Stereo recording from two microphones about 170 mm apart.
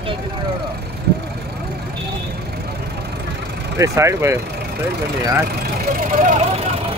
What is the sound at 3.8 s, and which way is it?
Speech, 15° right (ahead or behind).